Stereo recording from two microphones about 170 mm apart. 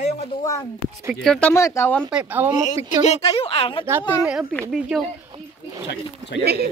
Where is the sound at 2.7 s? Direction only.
40° left (ahead or behind).